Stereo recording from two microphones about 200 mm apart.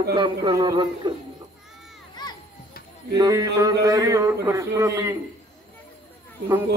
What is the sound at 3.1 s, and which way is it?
A man's voice, 15° right (ahead or behind).